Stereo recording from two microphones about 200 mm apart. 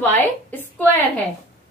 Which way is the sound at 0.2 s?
10° left (ahead or behind).